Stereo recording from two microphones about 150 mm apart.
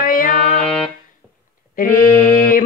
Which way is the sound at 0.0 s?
70° left (ahead or behind).